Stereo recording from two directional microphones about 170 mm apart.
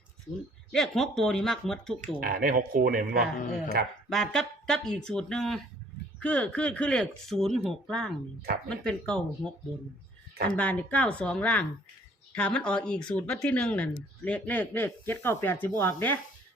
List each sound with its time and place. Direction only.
0.7 s speech: centre (ahead or behind)
2.0 s speech: 55° right (ahead or behind)
4.1 s speech: 5° left (ahead or behind)
10.5 s speech: 10° left (ahead or behind)